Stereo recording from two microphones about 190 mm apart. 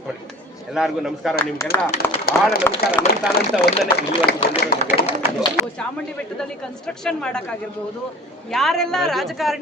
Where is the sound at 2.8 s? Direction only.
50° left (ahead or behind).